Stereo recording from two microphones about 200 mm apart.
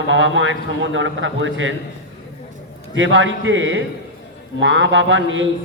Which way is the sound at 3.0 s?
70° right (ahead or behind).